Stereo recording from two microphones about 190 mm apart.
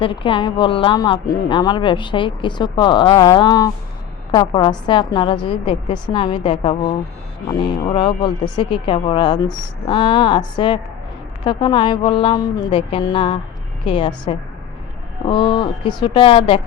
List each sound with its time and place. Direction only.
0.0 s speech: 25° left (ahead or behind)
11.4 s speech: 25° left (ahead or behind)
15.3 s speech: 25° left (ahead or behind)